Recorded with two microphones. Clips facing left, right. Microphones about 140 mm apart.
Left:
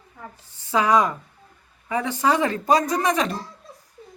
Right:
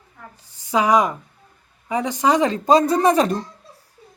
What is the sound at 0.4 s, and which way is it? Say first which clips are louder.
A woman's voice: right 2 dB; 15° right (ahead or behind).